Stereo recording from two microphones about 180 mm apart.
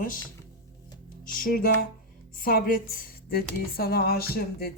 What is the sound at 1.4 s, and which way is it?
A woman's voice, 55° left (ahead or behind).